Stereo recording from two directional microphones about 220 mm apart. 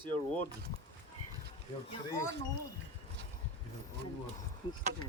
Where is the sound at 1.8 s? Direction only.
20° left (ahead or behind).